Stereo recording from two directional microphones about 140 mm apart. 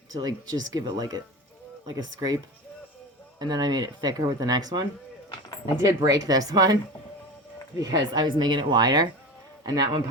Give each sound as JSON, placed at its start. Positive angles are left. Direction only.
{"t": 0.1, "sound": "speech", "side_deg": -30}
{"t": 7.8, "sound": "speech", "side_deg": -30}